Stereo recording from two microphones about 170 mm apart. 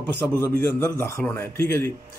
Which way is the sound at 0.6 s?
15° left (ahead or behind).